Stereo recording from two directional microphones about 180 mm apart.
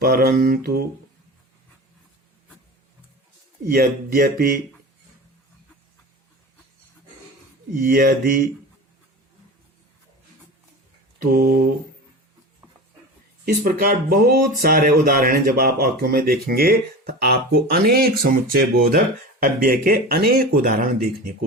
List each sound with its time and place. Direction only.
0.0 s speech: 55° right (ahead or behind)
3.7 s speech: 55° right (ahead or behind)
7.7 s speech: 50° right (ahead or behind)
11.3 s speech: 55° right (ahead or behind)
13.4 s speech: 55° right (ahead or behind)